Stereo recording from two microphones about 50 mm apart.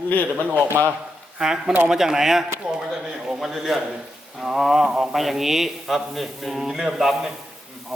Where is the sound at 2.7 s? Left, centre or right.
Centre.